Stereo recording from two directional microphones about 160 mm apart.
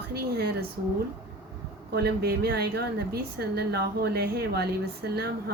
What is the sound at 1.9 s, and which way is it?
A woman's voice, 90° right.